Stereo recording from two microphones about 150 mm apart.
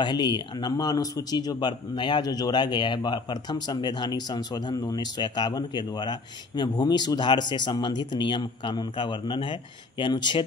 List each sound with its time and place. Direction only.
0.0 s speech: 30° left (ahead or behind)